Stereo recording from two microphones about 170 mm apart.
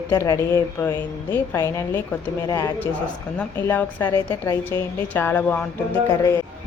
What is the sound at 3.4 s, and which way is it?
A woman's voice, 10° left (ahead or behind).